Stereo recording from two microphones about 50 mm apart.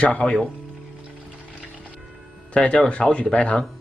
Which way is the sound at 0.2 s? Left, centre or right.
Centre.